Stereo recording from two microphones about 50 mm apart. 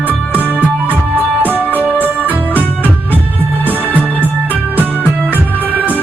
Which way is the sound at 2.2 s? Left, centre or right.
Right.